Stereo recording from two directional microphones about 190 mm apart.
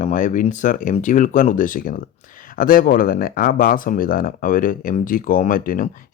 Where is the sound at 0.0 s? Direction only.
45° left (ahead or behind).